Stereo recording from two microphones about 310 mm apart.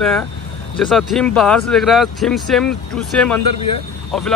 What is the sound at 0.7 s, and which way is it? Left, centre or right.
Speech, centre.